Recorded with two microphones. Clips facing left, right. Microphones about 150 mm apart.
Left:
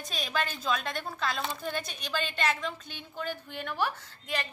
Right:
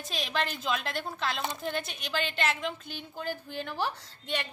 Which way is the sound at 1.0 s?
20° right (ahead or behind).